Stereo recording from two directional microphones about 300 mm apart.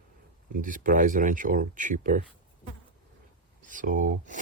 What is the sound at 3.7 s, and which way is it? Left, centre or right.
Speech, right.